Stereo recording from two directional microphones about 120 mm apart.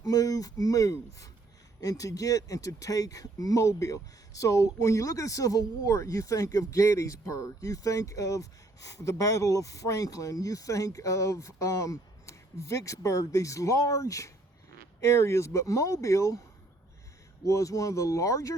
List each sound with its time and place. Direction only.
0.0 s speech: 30° left (ahead or behind)
17.4 s speech: 25° left (ahead or behind)